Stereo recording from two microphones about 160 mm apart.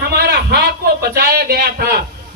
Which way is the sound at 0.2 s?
90° right.